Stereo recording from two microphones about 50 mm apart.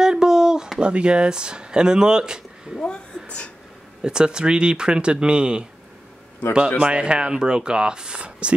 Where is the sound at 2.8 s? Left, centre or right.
Left.